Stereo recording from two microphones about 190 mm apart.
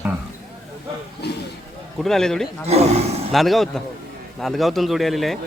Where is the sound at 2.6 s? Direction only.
35° right (ahead or behind).